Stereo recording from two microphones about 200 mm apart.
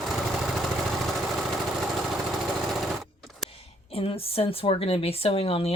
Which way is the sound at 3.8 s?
30° left (ahead or behind).